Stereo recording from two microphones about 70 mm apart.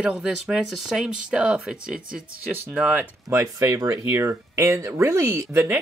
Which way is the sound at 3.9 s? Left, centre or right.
Right.